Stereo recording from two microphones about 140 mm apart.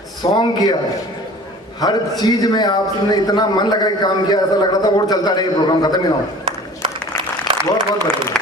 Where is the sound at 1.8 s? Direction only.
30° left (ahead or behind).